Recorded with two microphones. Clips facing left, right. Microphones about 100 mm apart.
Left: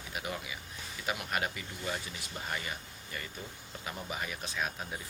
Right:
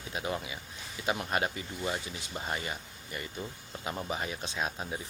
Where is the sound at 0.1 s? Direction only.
25° right (ahead or behind).